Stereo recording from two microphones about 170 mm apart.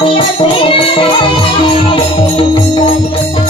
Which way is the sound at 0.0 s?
30° left (ahead or behind).